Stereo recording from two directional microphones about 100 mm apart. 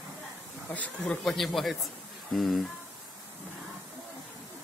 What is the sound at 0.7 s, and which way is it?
A man's voice, 10° left (ahead or behind).